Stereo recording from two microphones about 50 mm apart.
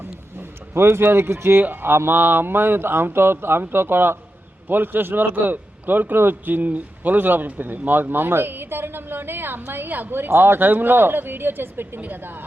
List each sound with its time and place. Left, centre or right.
0.0 s a sound: right
1.1 s speech: right
1.5 s a man's voice: right